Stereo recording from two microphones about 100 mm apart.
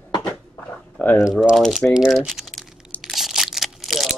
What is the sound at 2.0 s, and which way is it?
Crumpling, 5° right (ahead or behind).